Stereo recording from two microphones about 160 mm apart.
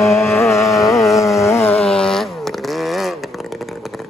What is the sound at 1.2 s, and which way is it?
Music, 20° left (ahead or behind).